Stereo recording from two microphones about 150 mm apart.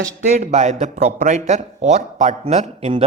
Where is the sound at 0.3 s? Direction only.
50° right (ahead or behind).